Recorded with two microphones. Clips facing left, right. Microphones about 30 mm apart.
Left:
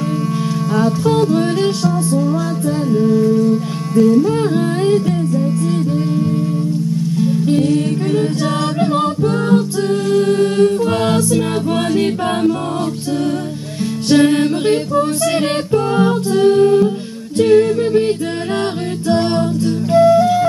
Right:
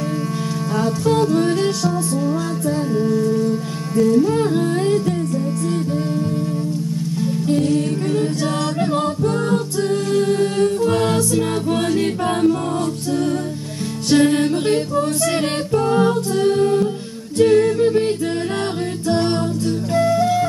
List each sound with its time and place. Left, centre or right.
0.7 s music: centre
4.4 s humming: centre
7.2 s music: centre
14.0 s music: centre
17.4 s a capella: centre
19.0 s music: centre